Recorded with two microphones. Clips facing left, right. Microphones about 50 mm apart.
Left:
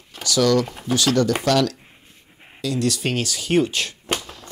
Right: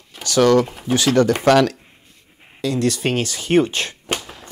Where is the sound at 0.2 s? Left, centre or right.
Right.